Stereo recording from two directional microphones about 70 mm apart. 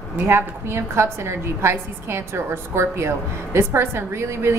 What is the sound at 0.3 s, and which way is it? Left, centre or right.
A woman's voice, right.